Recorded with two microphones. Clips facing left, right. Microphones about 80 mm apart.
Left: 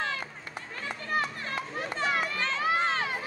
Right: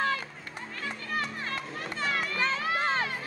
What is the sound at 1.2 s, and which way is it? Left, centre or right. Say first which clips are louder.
Children playing: left 1 dB; centre.